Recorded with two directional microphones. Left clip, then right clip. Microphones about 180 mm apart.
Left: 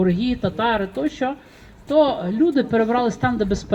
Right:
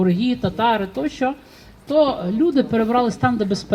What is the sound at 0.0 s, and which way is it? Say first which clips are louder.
Speech: right 1 dB; 65° right (ahead or behind).